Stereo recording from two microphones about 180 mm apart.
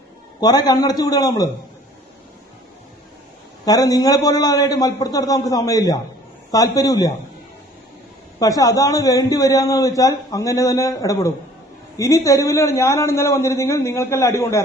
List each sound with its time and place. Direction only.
0.3 s a man's voice: 20° left (ahead or behind)
3.7 s a man's voice: 20° left (ahead or behind)
8.4 s a man's voice: 20° left (ahead or behind)